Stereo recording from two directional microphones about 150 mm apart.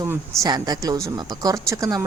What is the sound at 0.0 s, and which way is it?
Speech, 25° right (ahead or behind).